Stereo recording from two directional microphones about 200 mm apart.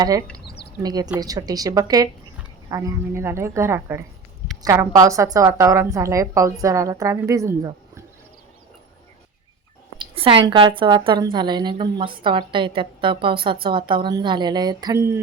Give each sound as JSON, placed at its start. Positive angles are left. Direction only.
{"t": 0.0, "sound": "a woman's voice", "side_deg": -20}
{"t": 0.4, "sound": "a sound", "side_deg": 55}
{"t": 0.8, "sound": "a woman's voice", "side_deg": -20}
{"t": 10.0, "sound": "a woman's voice", "side_deg": -25}